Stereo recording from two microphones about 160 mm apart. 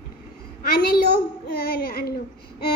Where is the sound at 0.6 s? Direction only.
70° left (ahead or behind).